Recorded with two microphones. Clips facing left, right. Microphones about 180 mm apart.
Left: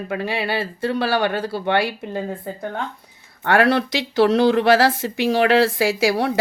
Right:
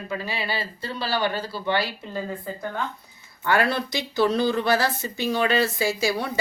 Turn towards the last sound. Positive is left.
turn(degrees=80)